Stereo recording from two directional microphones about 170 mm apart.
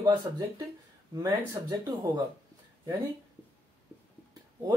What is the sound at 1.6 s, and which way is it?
Speech, 25° right (ahead or behind).